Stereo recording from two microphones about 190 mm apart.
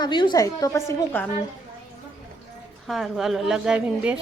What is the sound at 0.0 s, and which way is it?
A woman's voice, 25° left (ahead or behind).